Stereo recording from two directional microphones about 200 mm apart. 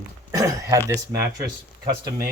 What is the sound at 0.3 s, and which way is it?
Throat clearing, 15° right (ahead or behind).